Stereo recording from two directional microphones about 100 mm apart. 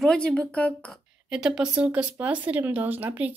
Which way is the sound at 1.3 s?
5° right (ahead or behind).